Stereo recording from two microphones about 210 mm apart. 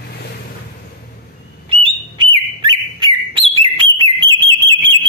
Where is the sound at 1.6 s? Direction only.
25° right (ahead or behind).